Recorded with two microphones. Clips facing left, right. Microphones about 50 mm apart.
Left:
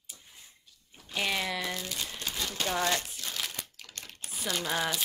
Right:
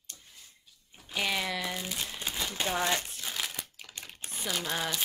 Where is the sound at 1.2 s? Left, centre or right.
Centre.